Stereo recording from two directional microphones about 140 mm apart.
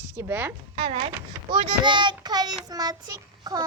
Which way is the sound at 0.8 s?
40° right (ahead or behind).